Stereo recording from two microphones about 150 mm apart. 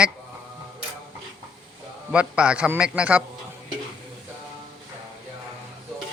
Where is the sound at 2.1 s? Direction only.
5° right (ahead or behind).